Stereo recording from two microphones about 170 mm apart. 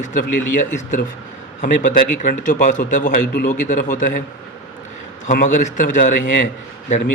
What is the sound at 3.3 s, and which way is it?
Speech, 60° left (ahead or behind).